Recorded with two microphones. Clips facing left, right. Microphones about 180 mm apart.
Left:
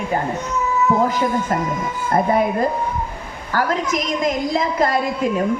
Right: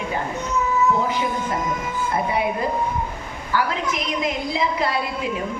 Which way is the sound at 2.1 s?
45° left (ahead or behind).